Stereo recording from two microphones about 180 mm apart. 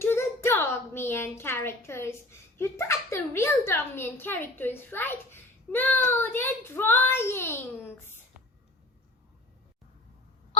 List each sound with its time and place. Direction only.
0.0 s a woman's voice: 15° left (ahead or behind)